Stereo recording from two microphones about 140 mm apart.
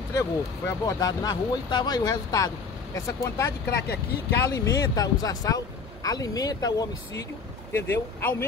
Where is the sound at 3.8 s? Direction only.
90° left.